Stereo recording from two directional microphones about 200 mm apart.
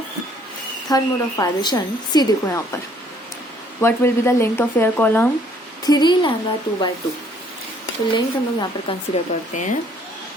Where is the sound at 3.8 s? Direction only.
10° left (ahead or behind).